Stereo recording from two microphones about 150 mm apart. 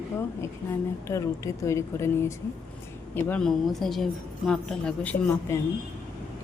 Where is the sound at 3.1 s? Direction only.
10° left (ahead or behind).